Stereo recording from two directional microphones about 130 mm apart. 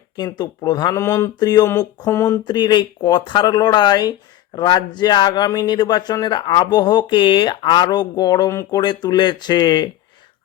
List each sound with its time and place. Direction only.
0.2 s speech: 30° left (ahead or behind)
0.9 s speech: 20° left (ahead or behind)
2.4 s speech: 35° left (ahead or behind)